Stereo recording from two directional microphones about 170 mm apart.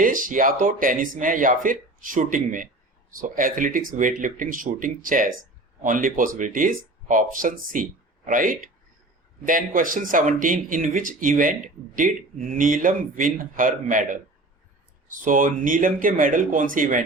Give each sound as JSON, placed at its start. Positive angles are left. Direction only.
{"t": 0.0, "sound": "speech", "side_deg": -55}